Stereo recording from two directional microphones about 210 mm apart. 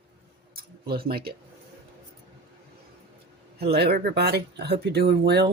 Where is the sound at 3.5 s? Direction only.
50° right (ahead or behind).